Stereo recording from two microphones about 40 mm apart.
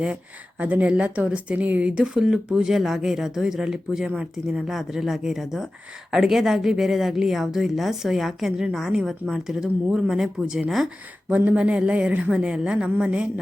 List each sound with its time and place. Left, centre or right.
0.6 s speech: right
1.8 s a woman's voice: right
4.5 s a woman's voice: centre
11.3 s speech: right
11.5 s a woman's voice: right